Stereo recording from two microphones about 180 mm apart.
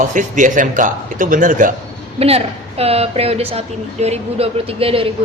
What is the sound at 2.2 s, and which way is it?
A woman's voice, 35° right (ahead or behind).